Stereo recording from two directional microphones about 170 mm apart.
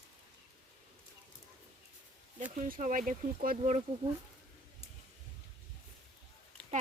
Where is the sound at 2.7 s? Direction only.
50° right (ahead or behind).